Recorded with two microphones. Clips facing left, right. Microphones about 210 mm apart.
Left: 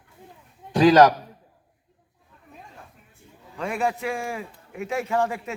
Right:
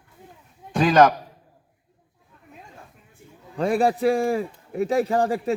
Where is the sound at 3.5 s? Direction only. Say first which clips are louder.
Right 6 dB; 35° right (ahead or behind).